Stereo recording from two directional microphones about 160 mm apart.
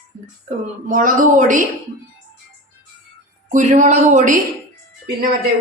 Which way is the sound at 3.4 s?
50° right (ahead or behind).